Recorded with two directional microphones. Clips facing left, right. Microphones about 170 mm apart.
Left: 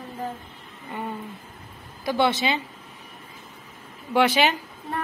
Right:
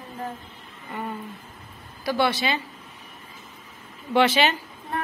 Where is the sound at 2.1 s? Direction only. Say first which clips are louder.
Left 1 dB; 20° left (ahead or behind).